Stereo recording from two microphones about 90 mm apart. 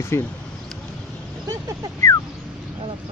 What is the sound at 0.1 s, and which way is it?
Speech, 30° left (ahead or behind).